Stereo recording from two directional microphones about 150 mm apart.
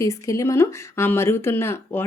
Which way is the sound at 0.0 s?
20° left (ahead or behind).